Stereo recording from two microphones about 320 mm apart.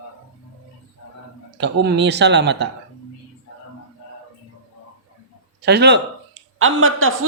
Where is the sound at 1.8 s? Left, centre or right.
Right.